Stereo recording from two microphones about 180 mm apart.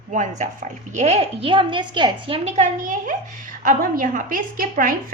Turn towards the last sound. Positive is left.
turn(degrees=-50)  # may be behind; listen again after turning